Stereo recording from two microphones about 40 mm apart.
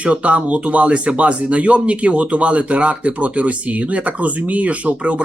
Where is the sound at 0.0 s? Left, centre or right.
Right.